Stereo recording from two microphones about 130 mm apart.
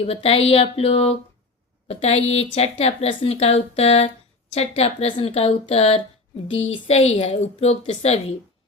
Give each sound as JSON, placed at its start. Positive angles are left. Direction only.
{"t": 0.0, "sound": "a woman's voice", "side_deg": 50}